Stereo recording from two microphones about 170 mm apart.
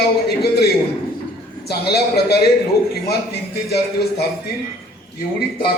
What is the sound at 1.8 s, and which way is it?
Speech, 70° left (ahead or behind).